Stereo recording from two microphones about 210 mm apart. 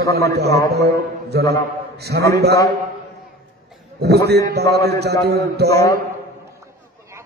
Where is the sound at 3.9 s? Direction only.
50° right (ahead or behind).